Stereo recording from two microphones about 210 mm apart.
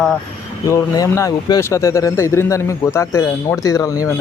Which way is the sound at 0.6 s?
15° left (ahead or behind).